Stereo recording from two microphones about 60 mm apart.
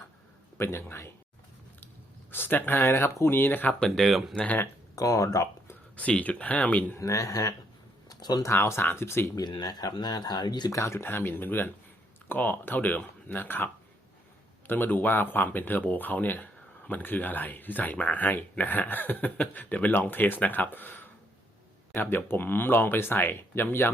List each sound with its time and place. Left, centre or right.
0.5 s speech: left
2.3 s speech: left
3.8 s speech: centre
4.9 s speech: left
6.0 s speech: left
6.9 s speech: left
8.1 s speech: left
8.5 s speech: left
9.3 s speech: left
10.7 s speech: left
14.7 s speech: left